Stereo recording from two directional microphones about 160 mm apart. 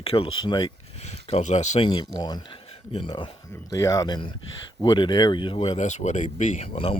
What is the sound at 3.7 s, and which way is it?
Speech, 20° left (ahead or behind).